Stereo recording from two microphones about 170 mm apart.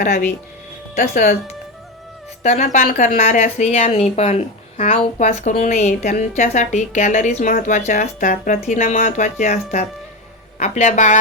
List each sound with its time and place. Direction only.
0.0 s a woman's voice: 50° left (ahead or behind)
2.4 s a woman's voice: 45° left (ahead or behind)